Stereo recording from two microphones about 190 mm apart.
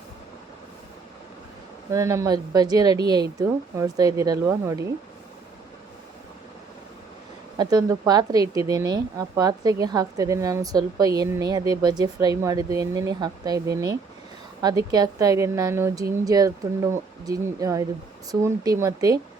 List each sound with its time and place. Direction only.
1.9 s speech: 15° right (ahead or behind)
7.6 s speech: 20° right (ahead or behind)